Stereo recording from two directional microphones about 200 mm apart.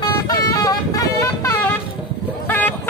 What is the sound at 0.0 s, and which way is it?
Vehicle, 20° left (ahead or behind).